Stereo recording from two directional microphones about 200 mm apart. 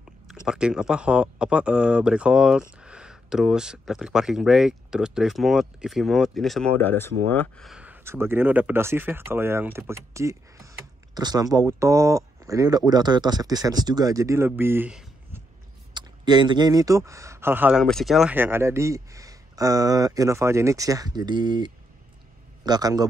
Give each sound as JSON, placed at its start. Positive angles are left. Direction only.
{"t": 0.5, "sound": "speech", "side_deg": -5}
{"t": 15.9, "sound": "a man's voice", "side_deg": -20}